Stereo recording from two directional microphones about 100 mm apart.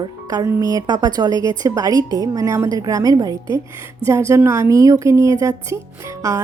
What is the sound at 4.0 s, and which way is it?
A woman's voice, 30° right (ahead or behind).